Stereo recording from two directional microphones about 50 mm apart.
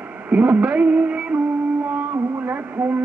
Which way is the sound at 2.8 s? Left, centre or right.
Right.